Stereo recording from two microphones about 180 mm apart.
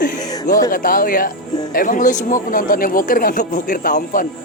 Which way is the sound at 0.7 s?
50° left (ahead or behind).